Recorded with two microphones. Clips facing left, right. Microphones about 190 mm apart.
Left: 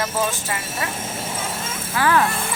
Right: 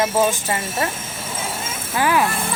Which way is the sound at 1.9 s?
15° right (ahead or behind).